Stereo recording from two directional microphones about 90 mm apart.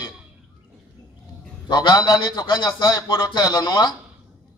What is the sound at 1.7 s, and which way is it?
A man's voice, 50° left (ahead or behind).